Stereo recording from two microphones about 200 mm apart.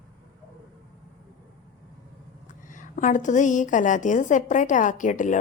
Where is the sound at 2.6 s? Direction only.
40° left (ahead or behind).